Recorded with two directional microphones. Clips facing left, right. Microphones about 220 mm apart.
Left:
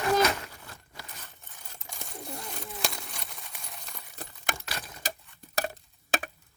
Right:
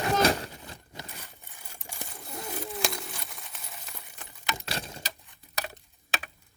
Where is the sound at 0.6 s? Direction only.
20° right (ahead or behind).